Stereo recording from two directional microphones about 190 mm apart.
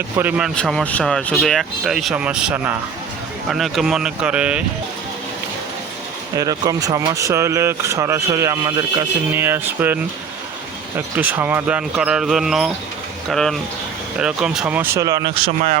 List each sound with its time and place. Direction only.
0.2 s speech: 5° right (ahead or behind)
0.5 s speech: 5° left (ahead or behind)
6.3 s speech: 20° right (ahead or behind); by 15.8 s 35° right (ahead or behind)